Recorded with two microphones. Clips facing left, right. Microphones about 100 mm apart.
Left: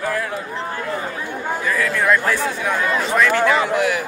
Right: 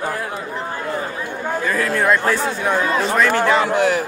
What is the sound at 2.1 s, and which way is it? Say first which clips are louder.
A man's voice: right 1 dB; 30° right (ahead or behind).